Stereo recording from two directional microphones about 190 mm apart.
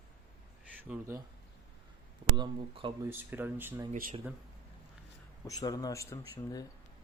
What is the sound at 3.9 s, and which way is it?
Speech, 45° right (ahead or behind).